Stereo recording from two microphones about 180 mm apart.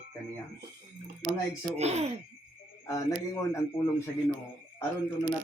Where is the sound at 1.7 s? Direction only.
35° right (ahead or behind).